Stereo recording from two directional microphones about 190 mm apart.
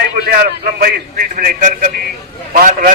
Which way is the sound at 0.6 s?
50° right (ahead or behind).